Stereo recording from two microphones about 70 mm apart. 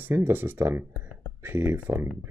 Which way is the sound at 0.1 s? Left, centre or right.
Right.